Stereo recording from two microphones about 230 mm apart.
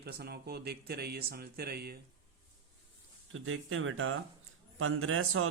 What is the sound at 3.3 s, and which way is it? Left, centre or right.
A man's voice, right.